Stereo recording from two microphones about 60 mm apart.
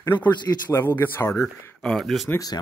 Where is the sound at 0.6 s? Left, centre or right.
Left.